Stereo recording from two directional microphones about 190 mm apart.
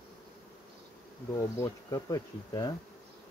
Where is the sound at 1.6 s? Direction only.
20° left (ahead or behind).